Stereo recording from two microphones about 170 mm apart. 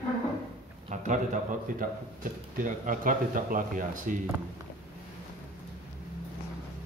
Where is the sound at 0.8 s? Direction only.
45° right (ahead or behind).